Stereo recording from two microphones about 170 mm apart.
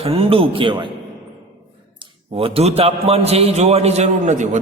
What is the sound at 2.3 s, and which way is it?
A man's voice, 35° right (ahead or behind).